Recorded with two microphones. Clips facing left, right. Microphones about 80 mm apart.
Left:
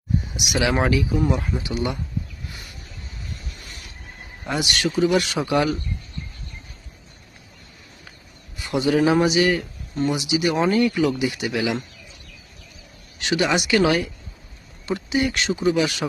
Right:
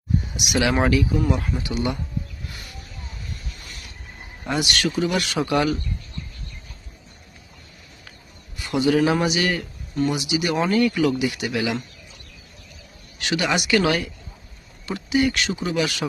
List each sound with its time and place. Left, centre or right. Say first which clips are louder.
0.3 s speech: right 1 dB; centre
1.3 s speech: even; centre
4.4 s speech: even; centre
8.5 s a sound: left 1 dB; centre
8.9 s speech: left 2 dB; centre
13.1 s speech: left 2 dB; centre
13.8 s speech: left 2 dB; centre
14.8 s speech: right 1 dB; left